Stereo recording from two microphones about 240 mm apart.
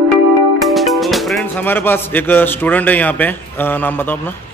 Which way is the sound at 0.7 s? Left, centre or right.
Centre.